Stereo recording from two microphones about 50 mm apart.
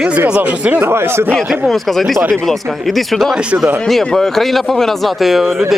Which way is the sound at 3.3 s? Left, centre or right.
Centre.